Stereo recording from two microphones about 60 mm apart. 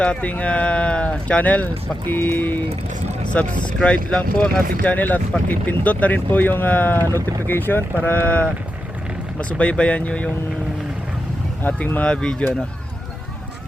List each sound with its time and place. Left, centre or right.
0.0 s speech: left
11.6 s speech: left
12.0 s speech: centre